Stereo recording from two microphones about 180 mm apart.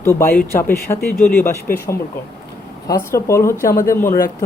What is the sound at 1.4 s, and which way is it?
Speech, 10° left (ahead or behind).